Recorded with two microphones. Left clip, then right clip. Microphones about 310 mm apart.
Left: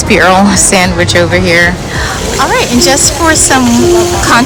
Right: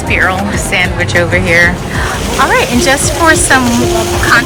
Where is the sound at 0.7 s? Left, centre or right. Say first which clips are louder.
Left 3 dB; centre.